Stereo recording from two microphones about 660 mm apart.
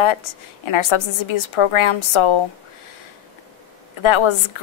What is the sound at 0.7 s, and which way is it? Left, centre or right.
A woman's voice, left.